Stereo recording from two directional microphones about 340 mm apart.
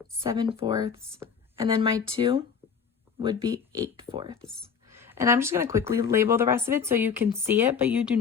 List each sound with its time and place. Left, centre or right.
0.2 s speech: centre
4.4 s speech: centre